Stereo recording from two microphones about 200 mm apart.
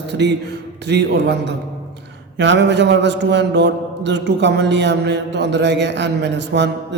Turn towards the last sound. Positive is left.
turn(degrees=-60)  # may be behind; listen again after turning